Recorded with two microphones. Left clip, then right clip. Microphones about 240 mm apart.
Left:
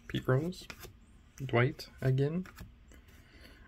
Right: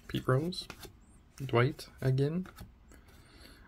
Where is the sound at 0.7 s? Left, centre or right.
Centre.